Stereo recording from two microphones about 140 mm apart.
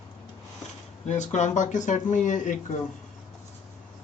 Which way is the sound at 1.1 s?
55° left (ahead or behind).